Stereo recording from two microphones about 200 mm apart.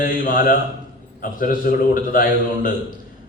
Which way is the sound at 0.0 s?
45° left (ahead or behind).